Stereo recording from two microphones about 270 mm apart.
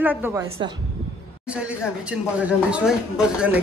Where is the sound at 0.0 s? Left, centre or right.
Centre.